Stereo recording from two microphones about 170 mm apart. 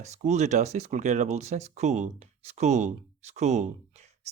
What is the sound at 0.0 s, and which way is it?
Speech, 40° right (ahead or behind).